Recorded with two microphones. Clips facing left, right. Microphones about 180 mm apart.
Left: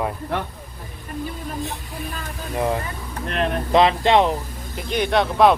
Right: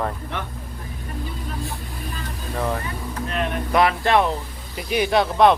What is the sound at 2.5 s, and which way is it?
Speech, 15° left (ahead or behind).